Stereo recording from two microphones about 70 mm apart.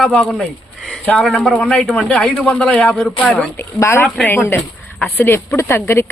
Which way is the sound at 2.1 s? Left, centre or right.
Centre.